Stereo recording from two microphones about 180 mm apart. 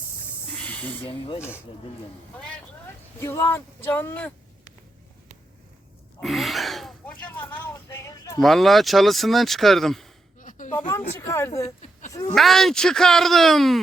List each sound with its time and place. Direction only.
0.5 s a sound: 10° left (ahead or behind)
1.4 s speech: 5° right (ahead or behind)
2.4 s a woman's voice: 15° left (ahead or behind)
6.1 s a sound: centre (ahead or behind); by 8.4 s 15° left (ahead or behind)
8.4 s speech: centre (ahead or behind)
10.8 s speech: 15° left (ahead or behind)
12.3 s speech: centre (ahead or behind)